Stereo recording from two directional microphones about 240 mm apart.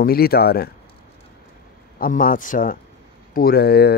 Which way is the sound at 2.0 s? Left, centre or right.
Left.